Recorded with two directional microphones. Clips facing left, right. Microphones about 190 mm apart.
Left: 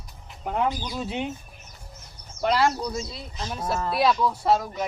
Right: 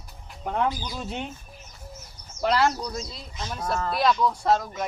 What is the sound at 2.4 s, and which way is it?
Speech, centre (ahead or behind).